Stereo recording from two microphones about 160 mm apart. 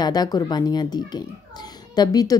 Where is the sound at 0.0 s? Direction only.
25° left (ahead or behind).